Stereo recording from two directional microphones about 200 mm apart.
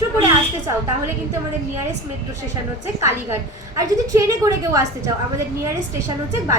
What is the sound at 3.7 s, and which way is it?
A woman's voice, 15° right (ahead or behind).